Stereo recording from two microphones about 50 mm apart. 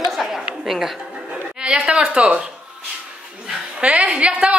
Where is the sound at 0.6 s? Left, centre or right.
Centre.